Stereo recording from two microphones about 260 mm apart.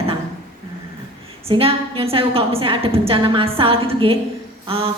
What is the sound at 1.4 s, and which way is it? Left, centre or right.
A woman's voice, right.